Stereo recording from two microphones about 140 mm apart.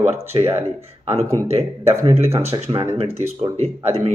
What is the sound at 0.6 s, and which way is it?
Speech, 45° right (ahead or behind).